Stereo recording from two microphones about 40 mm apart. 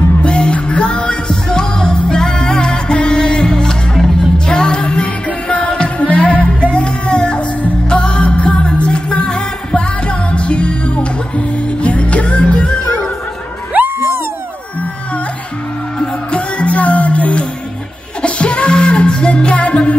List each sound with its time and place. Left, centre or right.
0.2 s music: left
6.0 s music: left
6.7 s music: left
13.9 s a sound: right
16.0 s music: left